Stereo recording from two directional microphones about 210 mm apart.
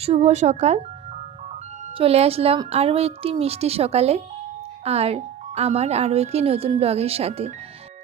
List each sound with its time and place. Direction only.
0.0 s speech: 30° right (ahead or behind)
2.0 s speech: 30° right (ahead or behind)